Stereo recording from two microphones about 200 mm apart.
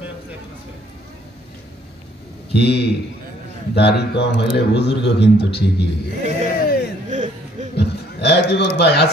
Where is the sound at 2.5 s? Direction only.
55° left (ahead or behind).